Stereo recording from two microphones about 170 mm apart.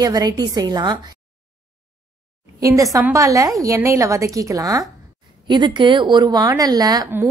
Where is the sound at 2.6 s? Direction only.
20° right (ahead or behind).